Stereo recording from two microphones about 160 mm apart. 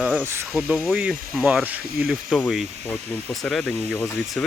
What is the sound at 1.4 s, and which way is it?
Speech, 10° right (ahead or behind).